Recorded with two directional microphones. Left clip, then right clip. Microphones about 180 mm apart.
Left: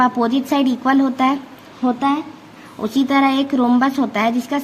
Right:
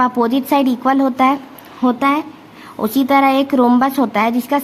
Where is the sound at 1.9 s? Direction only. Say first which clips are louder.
Right 3 dB; 35° right (ahead or behind).